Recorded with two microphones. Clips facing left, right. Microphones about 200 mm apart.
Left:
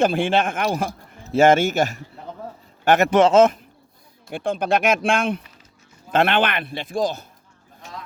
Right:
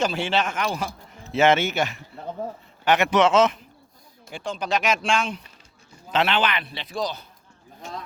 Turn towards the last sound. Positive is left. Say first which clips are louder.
# left 6 dB
turn(degrees=50)  # may be behind; listen again after turning